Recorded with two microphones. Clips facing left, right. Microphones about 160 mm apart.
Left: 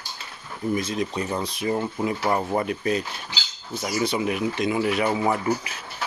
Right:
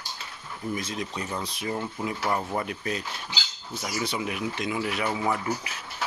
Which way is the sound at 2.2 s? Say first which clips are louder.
Left 4 dB; 20° left (ahead or behind).